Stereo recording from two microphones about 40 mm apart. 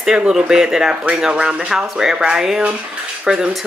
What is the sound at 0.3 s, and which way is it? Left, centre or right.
Speech, centre.